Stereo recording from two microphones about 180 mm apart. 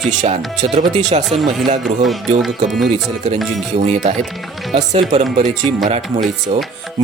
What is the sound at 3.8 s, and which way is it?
Speech, 40° right (ahead or behind).